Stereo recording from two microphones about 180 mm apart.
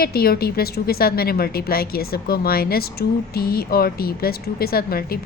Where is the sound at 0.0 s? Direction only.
60° left (ahead or behind).